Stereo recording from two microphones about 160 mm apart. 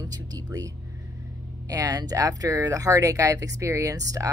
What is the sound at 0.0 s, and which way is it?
Speech, 25° right (ahead or behind).